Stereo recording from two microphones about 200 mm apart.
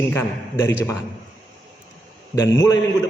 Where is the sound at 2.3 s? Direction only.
15° left (ahead or behind).